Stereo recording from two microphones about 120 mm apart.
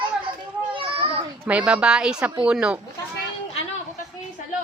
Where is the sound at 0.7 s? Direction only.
50° right (ahead or behind).